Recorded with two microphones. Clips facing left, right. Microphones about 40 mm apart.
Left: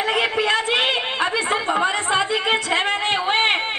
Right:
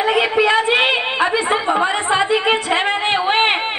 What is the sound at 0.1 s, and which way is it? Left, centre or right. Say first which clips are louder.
A woman's voice: right 5 dB; centre.